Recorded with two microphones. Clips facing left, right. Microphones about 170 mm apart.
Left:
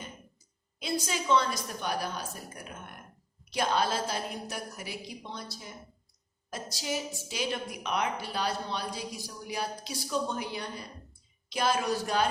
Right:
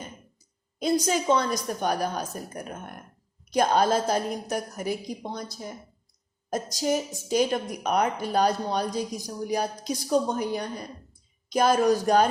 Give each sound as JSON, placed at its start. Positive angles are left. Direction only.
{"t": 0.8, "sound": "speech", "side_deg": -45}